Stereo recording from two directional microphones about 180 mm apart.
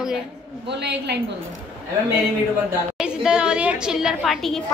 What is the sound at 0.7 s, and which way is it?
Speech, 70° right (ahead or behind).